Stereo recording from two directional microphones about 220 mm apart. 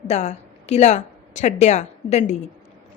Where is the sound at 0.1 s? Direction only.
30° left (ahead or behind).